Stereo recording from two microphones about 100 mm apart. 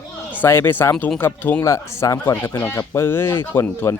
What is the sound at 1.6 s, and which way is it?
Speech, 35° left (ahead or behind).